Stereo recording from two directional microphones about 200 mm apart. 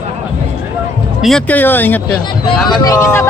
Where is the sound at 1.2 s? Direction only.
5° left (ahead or behind).